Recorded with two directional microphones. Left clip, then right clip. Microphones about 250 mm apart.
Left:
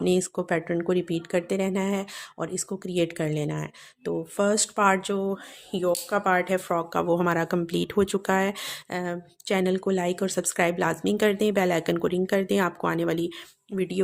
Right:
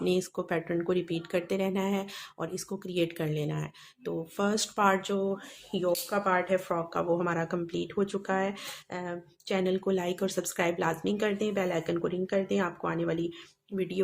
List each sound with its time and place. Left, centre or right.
0.0 s speech: left